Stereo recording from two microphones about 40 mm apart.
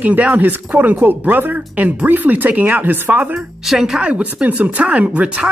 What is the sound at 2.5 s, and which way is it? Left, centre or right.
Speech, right.